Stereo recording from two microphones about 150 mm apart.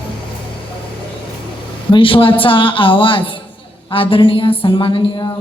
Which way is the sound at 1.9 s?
35° left (ahead or behind).